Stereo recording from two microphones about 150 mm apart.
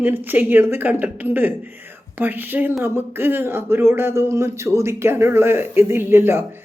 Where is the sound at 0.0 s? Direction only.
15° right (ahead or behind).